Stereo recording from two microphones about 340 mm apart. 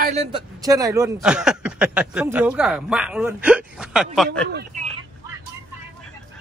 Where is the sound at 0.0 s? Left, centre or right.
Centre.